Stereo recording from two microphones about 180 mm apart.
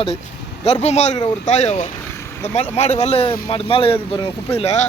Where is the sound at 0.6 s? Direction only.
35° left (ahead or behind).